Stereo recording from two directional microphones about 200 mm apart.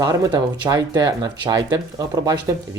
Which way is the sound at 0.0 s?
15° right (ahead or behind).